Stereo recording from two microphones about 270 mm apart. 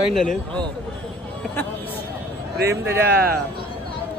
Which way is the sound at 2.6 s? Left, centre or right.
Right.